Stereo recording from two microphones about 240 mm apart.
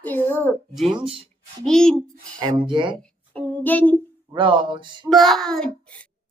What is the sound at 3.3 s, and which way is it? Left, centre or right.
Child singing, centre.